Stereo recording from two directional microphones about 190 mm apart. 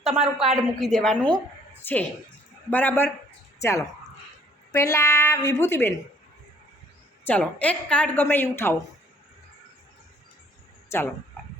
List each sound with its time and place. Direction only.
0.0 s a woman's voice: 30° right (ahead or behind)
0.5 s a woman's voice: 5° left (ahead or behind)
7.3 s a woman's voice: 5° left (ahead or behind)
10.9 s a woman's voice: 15° left (ahead or behind)